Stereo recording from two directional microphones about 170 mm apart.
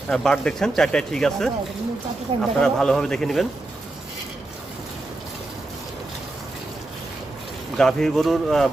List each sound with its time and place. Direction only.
0.1 s speech: 5° left (ahead or behind)
7.8 s speech: 5° left (ahead or behind)